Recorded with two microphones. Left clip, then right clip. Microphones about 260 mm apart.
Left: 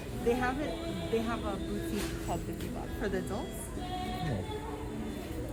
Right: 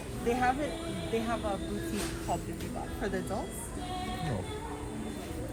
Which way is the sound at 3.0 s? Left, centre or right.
Centre.